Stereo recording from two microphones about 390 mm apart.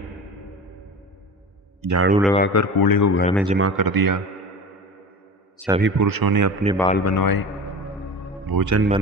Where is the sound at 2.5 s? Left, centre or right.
Left.